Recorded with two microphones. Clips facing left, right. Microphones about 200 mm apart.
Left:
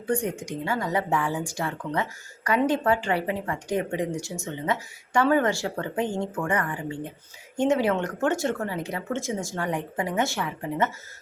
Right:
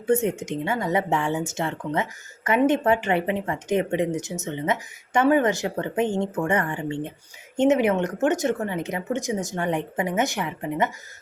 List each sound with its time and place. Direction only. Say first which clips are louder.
0.1 s speech: right 5 dB; 25° right (ahead or behind)